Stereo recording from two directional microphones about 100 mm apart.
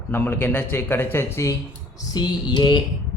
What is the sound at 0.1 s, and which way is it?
Speech, 20° left (ahead or behind).